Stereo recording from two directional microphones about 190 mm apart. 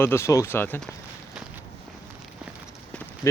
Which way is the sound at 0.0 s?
15° left (ahead or behind).